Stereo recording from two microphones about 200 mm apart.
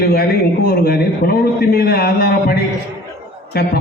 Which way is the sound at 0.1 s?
50° left (ahead or behind).